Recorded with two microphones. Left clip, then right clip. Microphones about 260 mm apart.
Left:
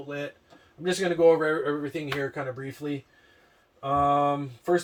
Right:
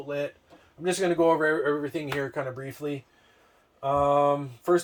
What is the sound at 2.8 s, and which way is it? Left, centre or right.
Speech, right.